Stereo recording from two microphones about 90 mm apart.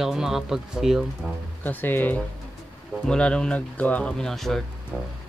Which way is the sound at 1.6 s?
20° left (ahead or behind).